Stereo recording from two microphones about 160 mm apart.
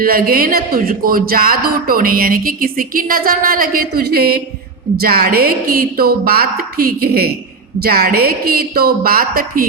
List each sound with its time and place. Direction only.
0.0 s a woman's voice: 65° right (ahead or behind)